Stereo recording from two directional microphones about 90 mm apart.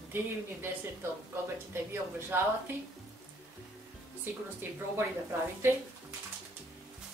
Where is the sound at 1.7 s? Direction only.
25° right (ahead or behind).